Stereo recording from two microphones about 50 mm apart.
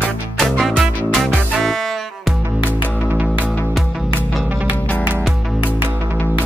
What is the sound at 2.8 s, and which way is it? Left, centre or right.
Music, right.